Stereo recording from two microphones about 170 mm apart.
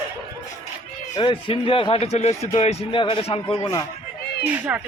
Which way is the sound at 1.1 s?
30° left (ahead or behind).